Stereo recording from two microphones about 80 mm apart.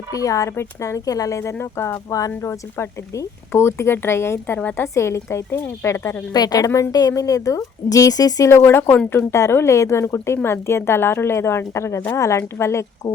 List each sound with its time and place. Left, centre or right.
0.1 s a woman's voice: left
1.4 s a woman's voice: left
4.9 s a woman's voice: left
6.3 s a woman's voice: left
8.6 s a woman's voice: left